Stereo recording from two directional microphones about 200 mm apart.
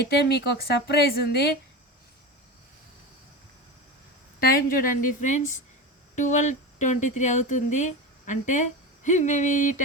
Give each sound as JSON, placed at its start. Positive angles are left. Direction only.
{"t": 0.0, "sound": "a woman's voice", "side_deg": 55}
{"t": 4.4, "sound": "a woman's voice", "side_deg": 45}